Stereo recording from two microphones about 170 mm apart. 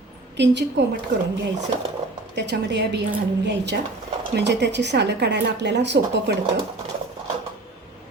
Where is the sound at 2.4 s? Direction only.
90° right.